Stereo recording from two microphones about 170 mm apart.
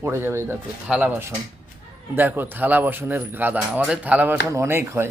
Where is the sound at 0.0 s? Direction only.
15° right (ahead or behind).